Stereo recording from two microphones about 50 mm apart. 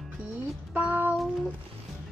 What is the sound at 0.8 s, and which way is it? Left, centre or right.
Speech, right.